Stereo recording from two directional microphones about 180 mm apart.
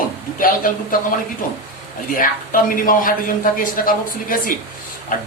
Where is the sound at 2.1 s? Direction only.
50° left (ahead or behind).